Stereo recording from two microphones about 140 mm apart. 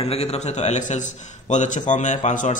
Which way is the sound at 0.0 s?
45° left (ahead or behind).